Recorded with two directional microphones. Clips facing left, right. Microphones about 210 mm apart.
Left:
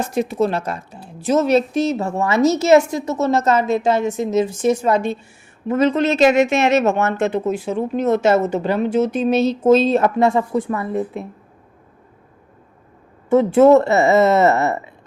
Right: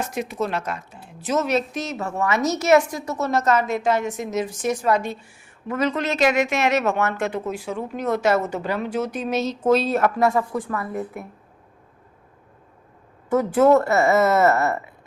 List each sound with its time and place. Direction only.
0.0 s a woman's voice: 30° left (ahead or behind)
13.3 s a woman's voice: 25° left (ahead or behind)